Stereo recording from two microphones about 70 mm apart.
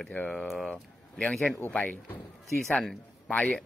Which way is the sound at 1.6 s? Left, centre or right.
Left.